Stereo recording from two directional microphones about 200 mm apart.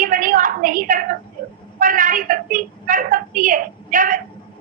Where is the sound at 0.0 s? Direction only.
45° right (ahead or behind).